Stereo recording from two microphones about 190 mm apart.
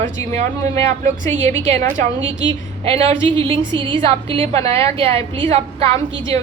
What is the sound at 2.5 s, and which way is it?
A woman's voice, 30° right (ahead or behind).